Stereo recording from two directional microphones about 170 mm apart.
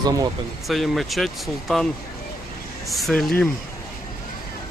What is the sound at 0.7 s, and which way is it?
Speech, centre (ahead or behind).